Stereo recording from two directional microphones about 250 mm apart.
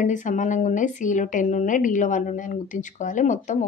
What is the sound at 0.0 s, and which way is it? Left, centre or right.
A woman's voice, left.